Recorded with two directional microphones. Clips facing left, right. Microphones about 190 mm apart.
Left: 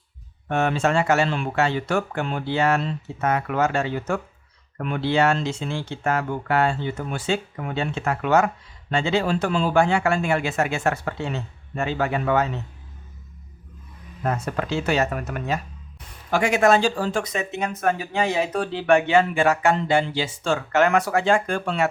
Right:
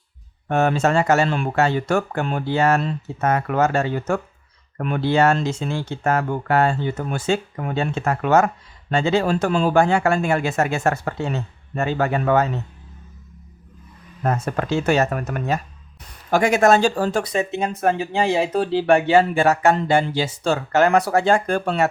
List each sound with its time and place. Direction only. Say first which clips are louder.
0.4 s speech: right 3 dB; 40° right (ahead or behind)
14.3 s speech: right 3 dB; 45° right (ahead or behind)